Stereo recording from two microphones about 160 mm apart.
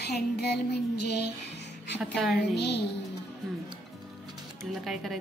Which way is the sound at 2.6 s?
90° left.